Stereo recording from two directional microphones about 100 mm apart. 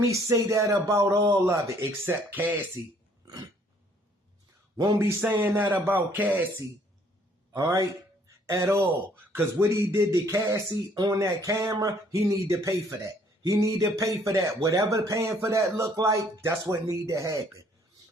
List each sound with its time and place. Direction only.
0.0 s speech: 30° right (ahead or behind)
2.0 s speech: 15° right (ahead or behind)
4.9 s speech: 25° right (ahead or behind)
7.5 s speech: 30° right (ahead or behind)